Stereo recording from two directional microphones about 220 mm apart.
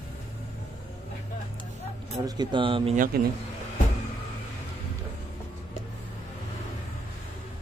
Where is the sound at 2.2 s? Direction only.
20° right (ahead or behind).